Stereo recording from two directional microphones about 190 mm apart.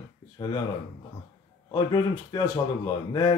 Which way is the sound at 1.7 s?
25° left (ahead or behind).